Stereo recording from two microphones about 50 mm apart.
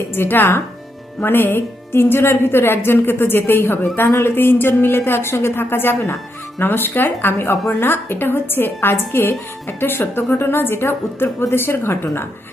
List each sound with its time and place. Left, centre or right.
0.2 s a woman's voice: left